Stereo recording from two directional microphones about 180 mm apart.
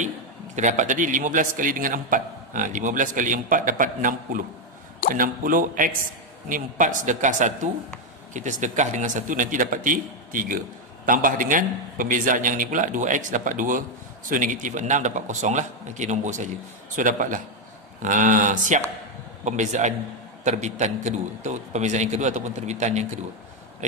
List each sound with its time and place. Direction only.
0.6 s a man's voice: 45° right (ahead or behind)